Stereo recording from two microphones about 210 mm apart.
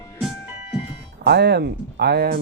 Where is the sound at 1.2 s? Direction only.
55° right (ahead or behind).